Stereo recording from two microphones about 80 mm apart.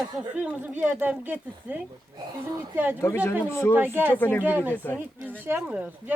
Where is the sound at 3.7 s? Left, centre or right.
Right.